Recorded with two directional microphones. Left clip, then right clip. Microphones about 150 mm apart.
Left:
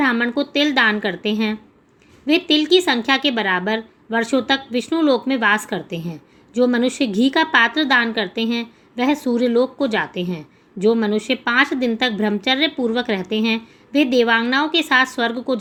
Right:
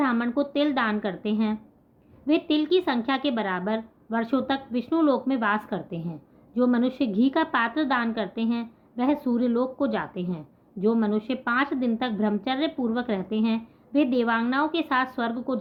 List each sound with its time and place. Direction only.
0.0 s a woman's voice: 15° left (ahead or behind)